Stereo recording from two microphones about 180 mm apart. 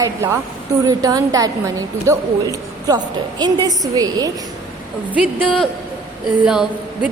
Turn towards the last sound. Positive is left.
turn(degrees=-5)  # may be behind; listen again after turning